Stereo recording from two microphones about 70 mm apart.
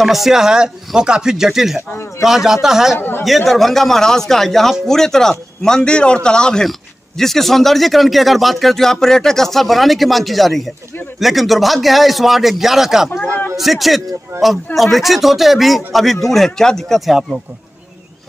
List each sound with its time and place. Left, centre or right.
0.0 s speech: centre
3.0 s speech: left
3.3 s a man's voice: centre